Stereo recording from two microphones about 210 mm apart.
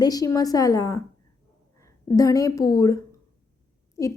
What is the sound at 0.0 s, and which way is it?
A woman's voice, 15° left (ahead or behind).